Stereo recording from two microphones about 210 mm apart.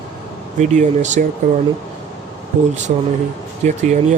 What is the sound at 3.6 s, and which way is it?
Speech, 35° right (ahead or behind).